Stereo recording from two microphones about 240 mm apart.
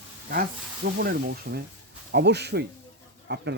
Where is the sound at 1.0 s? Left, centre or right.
Right.